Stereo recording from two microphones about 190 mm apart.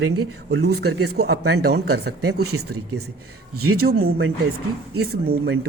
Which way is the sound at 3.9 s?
55° right (ahead or behind).